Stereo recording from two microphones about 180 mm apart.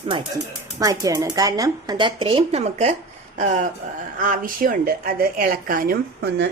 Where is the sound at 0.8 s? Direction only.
20° right (ahead or behind).